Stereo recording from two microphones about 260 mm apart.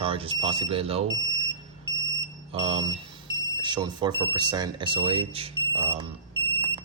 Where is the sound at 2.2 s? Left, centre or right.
Centre.